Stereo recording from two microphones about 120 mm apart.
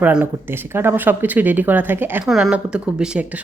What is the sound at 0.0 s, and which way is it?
Speech, 10° right (ahead or behind).